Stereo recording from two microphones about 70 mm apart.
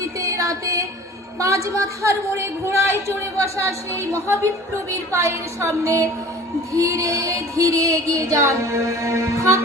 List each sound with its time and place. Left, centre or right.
0.0 s music: right
1.4 s speech: right